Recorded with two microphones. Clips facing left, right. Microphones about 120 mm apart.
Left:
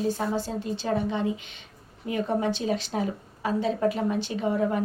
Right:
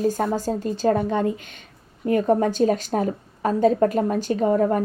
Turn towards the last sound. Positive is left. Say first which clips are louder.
# right 6 dB
turn(degrees=-45)  # may be behind; listen again after turning